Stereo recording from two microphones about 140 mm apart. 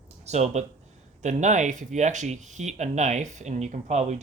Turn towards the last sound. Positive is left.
turn(degrees=-55)  # may be behind; listen again after turning